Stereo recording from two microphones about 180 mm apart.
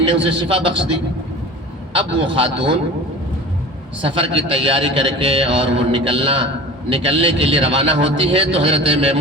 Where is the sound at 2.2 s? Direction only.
30° right (ahead or behind).